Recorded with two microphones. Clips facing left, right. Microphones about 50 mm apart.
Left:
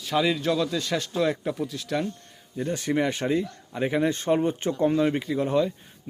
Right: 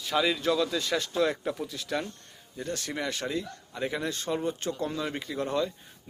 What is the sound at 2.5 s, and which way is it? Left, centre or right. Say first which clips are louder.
Speech: left 8 dB; centre.